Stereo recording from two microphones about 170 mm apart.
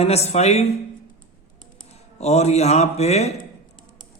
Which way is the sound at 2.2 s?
40° left (ahead or behind).